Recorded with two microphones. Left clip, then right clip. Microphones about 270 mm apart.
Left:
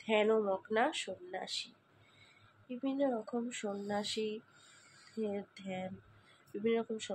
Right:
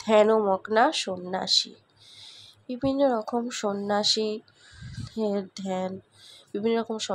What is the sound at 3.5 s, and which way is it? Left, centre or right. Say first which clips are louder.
Speech: right 12 dB; centre.